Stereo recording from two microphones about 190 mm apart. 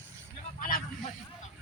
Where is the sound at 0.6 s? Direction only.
45° left (ahead or behind).